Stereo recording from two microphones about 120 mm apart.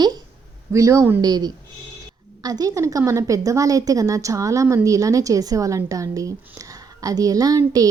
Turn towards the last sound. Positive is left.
turn(degrees=-30)  # may be behind; listen again after turning